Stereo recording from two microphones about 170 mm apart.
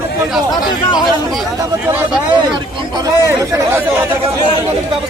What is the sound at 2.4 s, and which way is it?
Speech, 25° right (ahead or behind).